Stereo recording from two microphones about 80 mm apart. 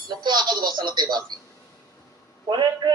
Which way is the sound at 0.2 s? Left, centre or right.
Right.